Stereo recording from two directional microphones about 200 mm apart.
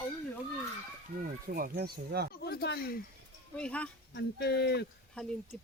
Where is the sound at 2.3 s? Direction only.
50° left (ahead or behind).